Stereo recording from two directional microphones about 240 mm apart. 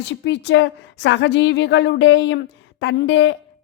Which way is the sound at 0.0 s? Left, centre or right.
Left.